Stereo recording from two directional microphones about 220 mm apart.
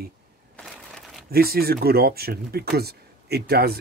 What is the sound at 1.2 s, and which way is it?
Speech, 45° right (ahead or behind).